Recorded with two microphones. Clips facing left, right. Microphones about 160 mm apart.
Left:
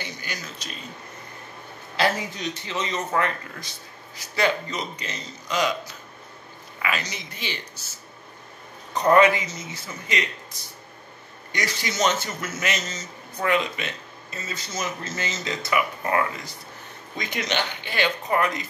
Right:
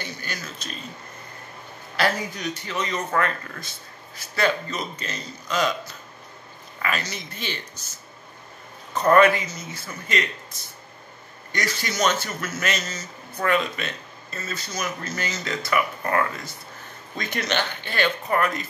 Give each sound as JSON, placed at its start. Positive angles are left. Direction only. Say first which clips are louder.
{"t": 0.0, "sound": "a man's voice", "louder": "right 1 dB", "side_deg": 15}
{"t": 2.0, "sound": "a man's voice", "louder": "even", "side_deg": 25}
{"t": 6.8, "sound": "a woman's voice", "louder": "right 1 dB", "side_deg": 15}
{"t": 8.9, "sound": "a man's voice", "louder": "right 1 dB", "side_deg": 15}